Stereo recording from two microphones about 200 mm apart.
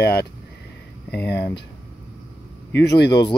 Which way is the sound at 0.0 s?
55° left (ahead or behind).